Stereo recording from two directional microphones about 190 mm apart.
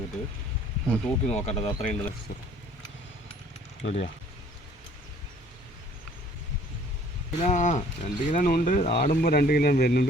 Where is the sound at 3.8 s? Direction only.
85° left.